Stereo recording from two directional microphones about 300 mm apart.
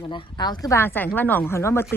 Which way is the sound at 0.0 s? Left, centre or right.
Centre.